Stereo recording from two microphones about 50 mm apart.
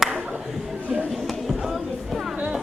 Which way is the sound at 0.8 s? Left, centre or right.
Right.